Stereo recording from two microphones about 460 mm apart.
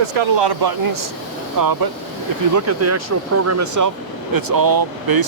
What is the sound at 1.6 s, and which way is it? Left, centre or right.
Speech, right.